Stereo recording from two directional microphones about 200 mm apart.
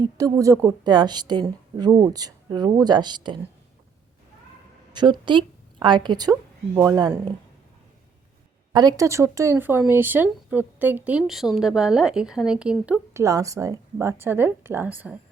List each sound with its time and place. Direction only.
0.0 s a woman's voice: 20° right (ahead or behind)
4.9 s a woman's voice: 20° right (ahead or behind)
8.7 s speech: 20° right (ahead or behind)